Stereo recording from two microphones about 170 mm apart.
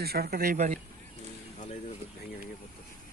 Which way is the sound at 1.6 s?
40° left (ahead or behind).